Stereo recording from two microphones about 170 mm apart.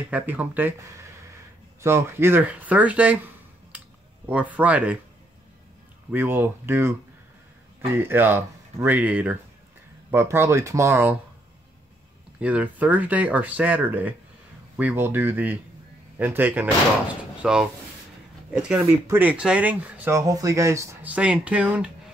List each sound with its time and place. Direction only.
0.1 s speech: 10° right (ahead or behind)
4.3 s speech: 10° right (ahead or behind)
6.1 s speech: 10° right (ahead or behind)
12.4 s speech: 10° right (ahead or behind)